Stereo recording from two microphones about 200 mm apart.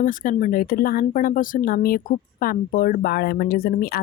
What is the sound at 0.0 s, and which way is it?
Speech, 40° left (ahead or behind).